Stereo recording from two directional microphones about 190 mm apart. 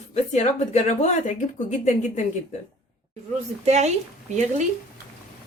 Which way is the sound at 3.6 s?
35° right (ahead or behind).